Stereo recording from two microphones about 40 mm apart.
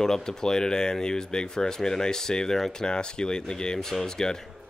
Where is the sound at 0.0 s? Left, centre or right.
Centre.